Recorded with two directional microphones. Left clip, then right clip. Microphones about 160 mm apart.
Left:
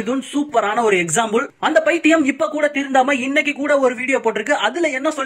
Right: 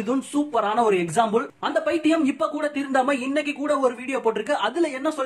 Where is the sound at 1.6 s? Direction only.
20° left (ahead or behind).